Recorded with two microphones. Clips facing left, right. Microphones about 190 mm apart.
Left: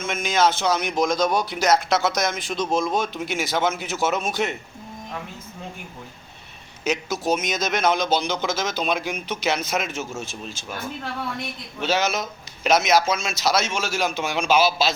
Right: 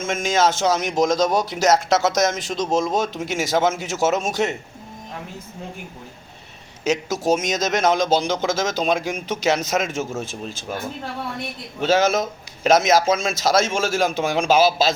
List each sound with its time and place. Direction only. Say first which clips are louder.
0.0 s speech: right 2 dB; 45° right (ahead or behind)
6.9 s speech: right 4 dB; 45° right (ahead or behind)
11.8 s speech: right 5 dB; 45° right (ahead or behind)